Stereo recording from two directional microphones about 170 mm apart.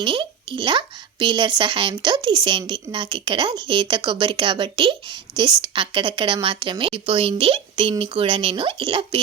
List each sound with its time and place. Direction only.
0.0 s speech: 30° right (ahead or behind)